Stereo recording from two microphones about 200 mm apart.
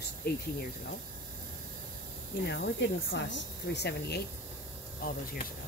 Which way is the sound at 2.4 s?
55° left (ahead or behind).